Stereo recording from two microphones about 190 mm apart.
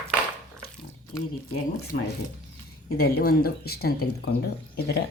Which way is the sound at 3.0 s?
50° left (ahead or behind).